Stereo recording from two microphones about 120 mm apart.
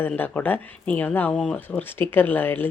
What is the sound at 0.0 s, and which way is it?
Speech, 15° left (ahead or behind).